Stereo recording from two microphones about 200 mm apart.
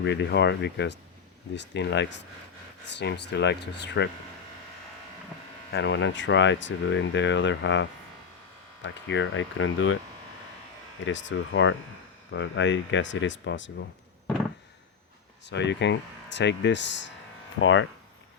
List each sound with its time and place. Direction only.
0.0 s speech: 55° left (ahead or behind)
5.7 s speech: 60° left (ahead or behind); by 10.0 s 80° left
11.0 s speech: 65° left (ahead or behind)
15.4 s speech: 60° left (ahead or behind)
17.6 s speech: 75° left (ahead or behind)